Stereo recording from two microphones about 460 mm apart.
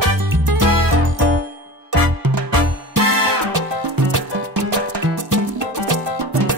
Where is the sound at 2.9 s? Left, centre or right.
Right.